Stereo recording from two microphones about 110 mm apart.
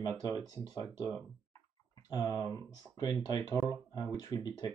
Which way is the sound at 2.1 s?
30° left (ahead or behind).